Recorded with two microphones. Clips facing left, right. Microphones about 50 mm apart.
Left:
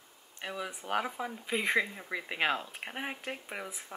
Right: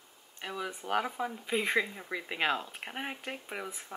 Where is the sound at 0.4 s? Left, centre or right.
Centre.